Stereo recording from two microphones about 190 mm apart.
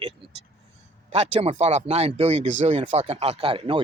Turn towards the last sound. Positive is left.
turn(degrees=-30)  # may be behind; listen again after turning